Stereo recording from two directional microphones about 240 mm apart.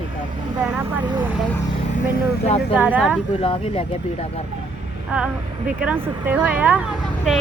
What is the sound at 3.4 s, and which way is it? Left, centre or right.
Speech, left.